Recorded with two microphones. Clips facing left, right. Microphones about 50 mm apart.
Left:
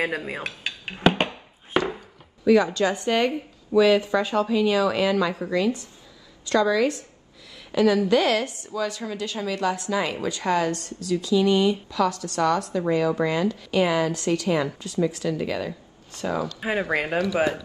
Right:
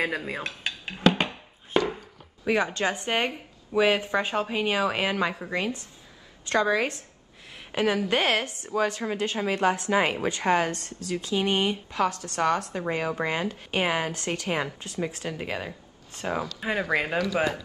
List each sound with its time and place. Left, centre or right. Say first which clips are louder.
0.0 s speech: left 2 dB; centre
1.7 s a sound: left 1 dB; left
2.4 s a woman's voice: left 6 dB; right
16.5 s speech: left 2 dB; centre